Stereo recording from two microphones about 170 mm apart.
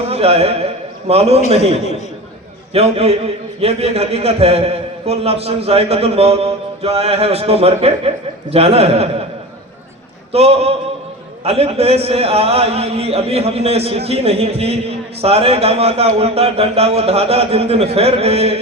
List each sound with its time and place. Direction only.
0.1 s a man's voice: 35° right (ahead or behind)
10.3 s a man's voice: 35° right (ahead or behind)